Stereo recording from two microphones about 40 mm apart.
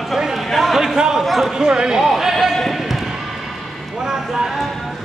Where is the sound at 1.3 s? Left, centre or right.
Centre.